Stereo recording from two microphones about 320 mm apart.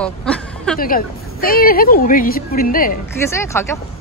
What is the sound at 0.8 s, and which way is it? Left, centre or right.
A woman's voice, left.